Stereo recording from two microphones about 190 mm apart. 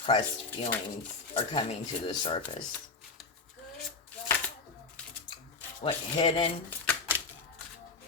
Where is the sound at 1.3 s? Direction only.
30° left (ahead or behind).